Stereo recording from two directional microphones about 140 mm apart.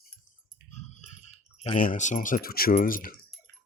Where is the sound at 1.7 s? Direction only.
75° left (ahead or behind).